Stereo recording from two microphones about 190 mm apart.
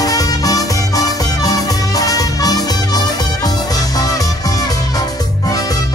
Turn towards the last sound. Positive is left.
turn(degrees=20)  # may be behind; listen again after turning